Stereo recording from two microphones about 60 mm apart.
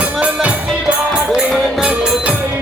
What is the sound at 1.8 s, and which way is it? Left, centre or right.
Music, centre.